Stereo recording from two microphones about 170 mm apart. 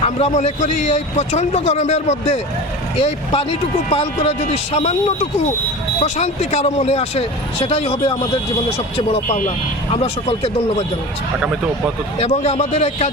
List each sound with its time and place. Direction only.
0.0 s a man's voice: 35° left (ahead or behind)
6.0 s a man's voice: 40° left (ahead or behind)
9.2 s speech: 50° left (ahead or behind)
9.9 s a man's voice: 35° left (ahead or behind)
12.2 s a man's voice: 40° left (ahead or behind)